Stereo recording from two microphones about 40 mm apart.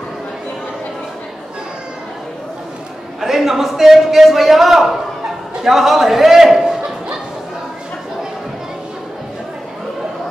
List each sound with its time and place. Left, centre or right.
3.2 s a man's voice: centre